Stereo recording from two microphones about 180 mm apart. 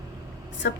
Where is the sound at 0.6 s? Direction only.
80° left.